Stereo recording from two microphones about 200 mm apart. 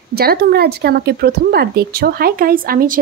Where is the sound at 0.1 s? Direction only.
50° right (ahead or behind).